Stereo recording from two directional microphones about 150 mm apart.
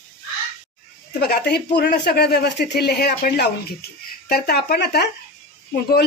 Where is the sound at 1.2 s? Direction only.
90° left.